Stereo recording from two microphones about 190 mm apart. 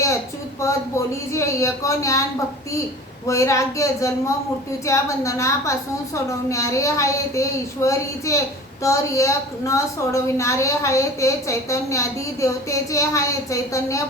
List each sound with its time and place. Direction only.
0.6 s a woman's voice: 15° left (ahead or behind)
3.2 s a woman's voice: 15° left (ahead or behind)